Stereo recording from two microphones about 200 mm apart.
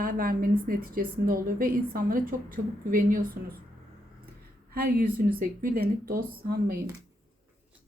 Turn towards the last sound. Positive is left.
turn(degrees=-50)  # may be behind; listen again after turning